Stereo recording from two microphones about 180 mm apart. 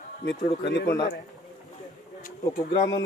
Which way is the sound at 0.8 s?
20° left (ahead or behind).